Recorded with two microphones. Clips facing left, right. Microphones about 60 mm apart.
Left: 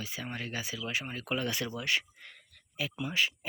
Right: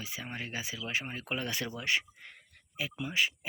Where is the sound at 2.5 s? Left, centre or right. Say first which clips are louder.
Left 1 dB; right.